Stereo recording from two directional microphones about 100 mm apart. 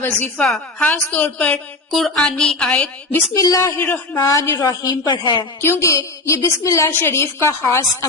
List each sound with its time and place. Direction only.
0.0 s a woman's voice: 15° left (ahead or behind)
1.9 s a woman's voice: centre (ahead or behind)
3.3 s a woman's voice: 35° left (ahead or behind)
3.8 s a woman's voice: 15° left (ahead or behind)
4.2 s a woman's voice: 30° left (ahead or behind)
4.6 s a woman's voice: 45° left (ahead or behind)
5.6 s a woman's voice: 30° left (ahead or behind)